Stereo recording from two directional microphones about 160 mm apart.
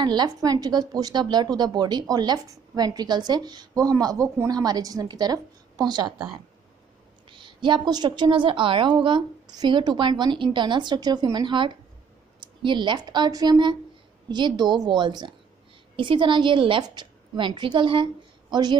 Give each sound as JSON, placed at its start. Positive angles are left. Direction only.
{"t": 0.0, "sound": "a woman's voice", "side_deg": -25}